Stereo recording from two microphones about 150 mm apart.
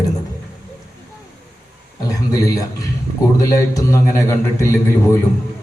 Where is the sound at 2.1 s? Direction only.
20° left (ahead or behind).